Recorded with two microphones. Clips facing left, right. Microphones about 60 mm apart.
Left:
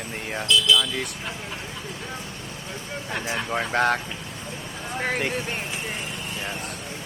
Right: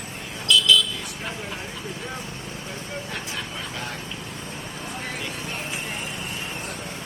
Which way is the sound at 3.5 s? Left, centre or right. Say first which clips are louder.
Left 11 dB; left.